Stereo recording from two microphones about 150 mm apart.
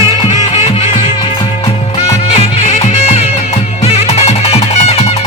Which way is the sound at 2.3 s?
50° left (ahead or behind).